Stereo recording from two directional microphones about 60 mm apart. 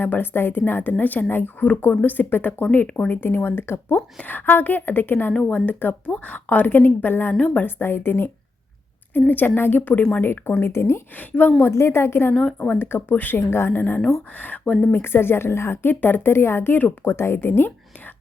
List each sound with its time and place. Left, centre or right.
0.0 s a woman's voice: left
3.1 s a woman's voice: left
7.3 s a woman's voice: left
7.8 s a woman's voice: left
10.2 s a woman's voice: left
11.2 s a woman's voice: left
11.6 s a woman's voice: left
12.3 s speech: centre
12.5 s a woman's voice: left
15.0 s a woman's voice: left